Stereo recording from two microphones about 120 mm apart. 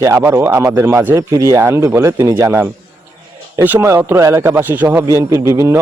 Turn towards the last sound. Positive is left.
turn(degrees=-25)  # may be behind; listen again after turning